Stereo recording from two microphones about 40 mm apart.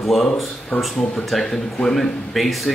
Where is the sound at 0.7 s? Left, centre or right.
Left.